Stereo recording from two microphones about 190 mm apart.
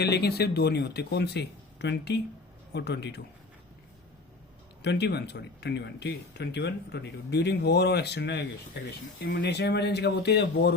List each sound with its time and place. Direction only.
0.0 s speech: 60° left (ahead or behind)
4.8 s speech: 60° left (ahead or behind)